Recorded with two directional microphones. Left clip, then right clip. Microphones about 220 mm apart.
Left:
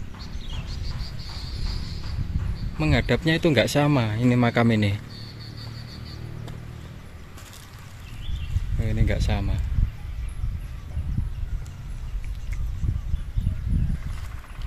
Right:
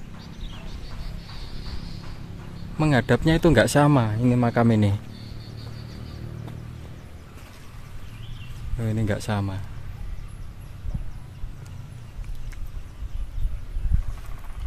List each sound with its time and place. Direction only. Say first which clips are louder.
2.8 s speech: right 2 dB; 15° right (ahead or behind)
8.8 s speech: right 2 dB; 20° right (ahead or behind)